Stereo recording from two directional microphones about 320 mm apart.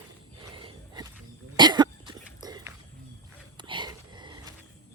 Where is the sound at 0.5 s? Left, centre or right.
Centre.